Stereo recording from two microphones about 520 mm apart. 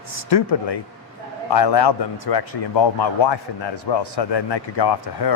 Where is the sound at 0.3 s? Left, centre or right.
Left.